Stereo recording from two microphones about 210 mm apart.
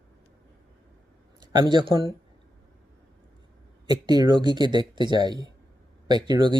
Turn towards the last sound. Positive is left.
turn(degrees=-20)  # may be behind; listen again after turning